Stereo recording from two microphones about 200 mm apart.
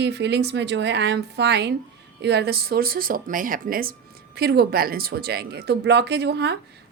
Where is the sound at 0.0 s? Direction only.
60° right (ahead or behind).